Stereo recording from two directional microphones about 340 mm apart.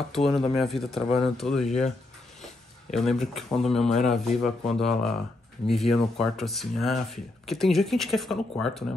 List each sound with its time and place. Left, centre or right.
0.1 s speech: centre
1.0 s speech: centre
1.3 s speech: centre
1.7 s speech: centre
2.4 s speech: centre